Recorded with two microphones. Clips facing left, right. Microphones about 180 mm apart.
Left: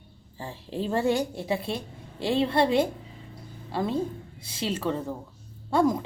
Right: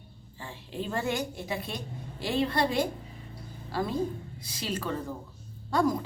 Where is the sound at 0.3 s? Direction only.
35° left (ahead or behind).